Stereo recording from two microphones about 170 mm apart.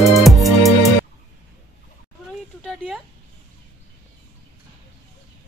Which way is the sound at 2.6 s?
5° left (ahead or behind).